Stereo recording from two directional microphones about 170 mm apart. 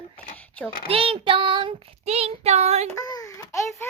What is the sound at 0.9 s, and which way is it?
Child singing, 35° right (ahead or behind).